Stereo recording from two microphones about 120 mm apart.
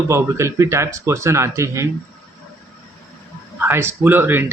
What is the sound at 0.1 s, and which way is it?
Speech, 25° right (ahead or behind).